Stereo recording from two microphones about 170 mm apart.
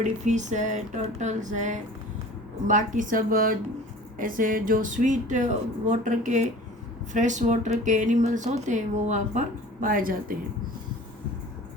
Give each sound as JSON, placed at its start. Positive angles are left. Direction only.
{"t": 0.0, "sound": "speech", "side_deg": -45}
{"t": 9.8, "sound": "a woman's voice", "side_deg": -55}